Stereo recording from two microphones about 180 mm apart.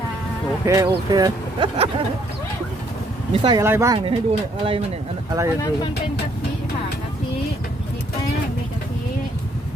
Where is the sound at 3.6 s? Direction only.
15° right (ahead or behind).